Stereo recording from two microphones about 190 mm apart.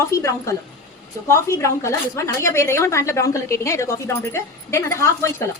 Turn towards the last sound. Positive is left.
turn(degrees=15)  # may be behind; listen again after turning